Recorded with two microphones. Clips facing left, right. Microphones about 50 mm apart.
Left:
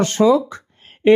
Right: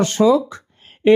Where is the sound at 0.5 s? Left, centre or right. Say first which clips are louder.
Left 1 dB; left.